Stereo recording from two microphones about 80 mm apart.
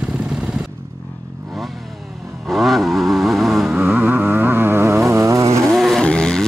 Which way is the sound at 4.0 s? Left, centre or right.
Centre.